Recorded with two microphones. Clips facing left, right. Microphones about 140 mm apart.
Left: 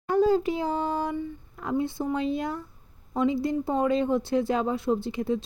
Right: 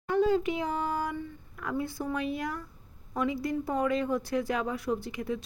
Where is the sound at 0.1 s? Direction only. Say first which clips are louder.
Left 4 dB; 35° left (ahead or behind).